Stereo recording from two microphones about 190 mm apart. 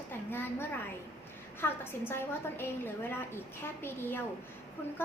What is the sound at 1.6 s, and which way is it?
A woman's voice, 10° left (ahead or behind).